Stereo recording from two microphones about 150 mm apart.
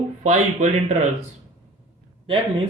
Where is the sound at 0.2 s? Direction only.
50° right (ahead or behind).